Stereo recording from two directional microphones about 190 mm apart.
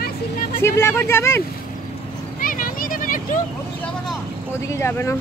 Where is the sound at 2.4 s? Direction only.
45° left (ahead or behind).